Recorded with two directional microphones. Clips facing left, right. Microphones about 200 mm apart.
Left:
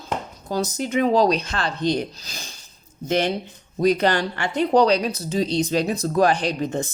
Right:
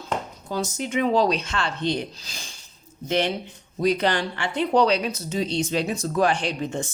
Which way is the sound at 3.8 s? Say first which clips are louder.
Left 3 dB; 45° left (ahead or behind).